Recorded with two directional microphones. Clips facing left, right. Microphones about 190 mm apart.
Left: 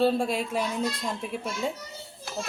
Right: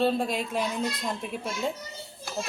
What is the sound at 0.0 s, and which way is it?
A child's voice, 5° left (ahead or behind).